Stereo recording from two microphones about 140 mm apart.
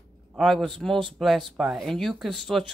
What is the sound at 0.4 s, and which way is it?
Speech, centre (ahead or behind).